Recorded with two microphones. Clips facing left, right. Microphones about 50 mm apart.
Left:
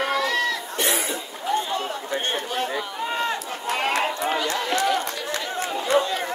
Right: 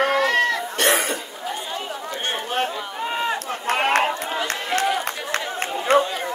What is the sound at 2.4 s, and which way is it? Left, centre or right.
Chatter, right.